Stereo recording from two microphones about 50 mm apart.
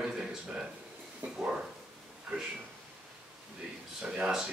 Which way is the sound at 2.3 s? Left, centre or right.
Centre.